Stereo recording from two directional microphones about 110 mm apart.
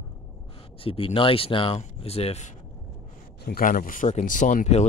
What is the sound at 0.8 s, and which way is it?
Speech, 55° left (ahead or behind).